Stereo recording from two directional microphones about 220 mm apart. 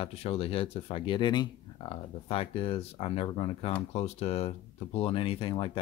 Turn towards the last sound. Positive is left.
turn(degrees=25)  # may be behind; listen again after turning